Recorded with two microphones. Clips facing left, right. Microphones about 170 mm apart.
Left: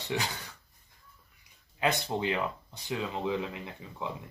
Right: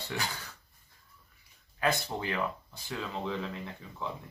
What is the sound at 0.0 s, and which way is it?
Speech, 20° left (ahead or behind).